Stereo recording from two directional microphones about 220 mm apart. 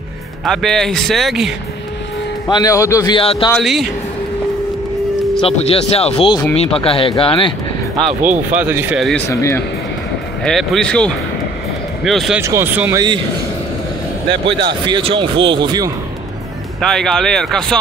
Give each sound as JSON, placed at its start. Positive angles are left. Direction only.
{"t": 0.5, "sound": "speech", "side_deg": 0}
{"t": 2.5, "sound": "speech", "side_deg": 15}
{"t": 3.5, "sound": "speech", "side_deg": 0}
{"t": 5.4, "sound": "speech", "side_deg": 25}
{"t": 8.5, "sound": "speech", "side_deg": -10}
{"t": 9.3, "sound": "speech", "side_deg": 15}
{"t": 10.4, "sound": "speech", "side_deg": 0}
{"t": 12.4, "sound": "speech", "side_deg": -10}
{"t": 14.9, "sound": "speech", "side_deg": -25}
{"t": 16.8, "sound": "speech", "side_deg": 0}